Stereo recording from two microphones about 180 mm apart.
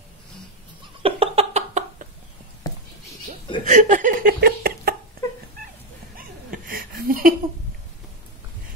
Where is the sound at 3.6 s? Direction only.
45° right (ahead or behind).